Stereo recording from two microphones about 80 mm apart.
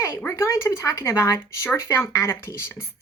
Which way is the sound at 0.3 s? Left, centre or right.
Left.